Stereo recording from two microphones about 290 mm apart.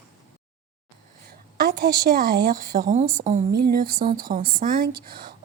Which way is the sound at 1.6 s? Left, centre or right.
Right.